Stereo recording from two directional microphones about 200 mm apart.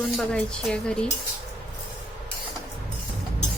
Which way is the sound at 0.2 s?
5° left (ahead or behind).